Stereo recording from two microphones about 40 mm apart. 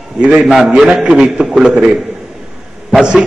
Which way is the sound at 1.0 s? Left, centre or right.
Right.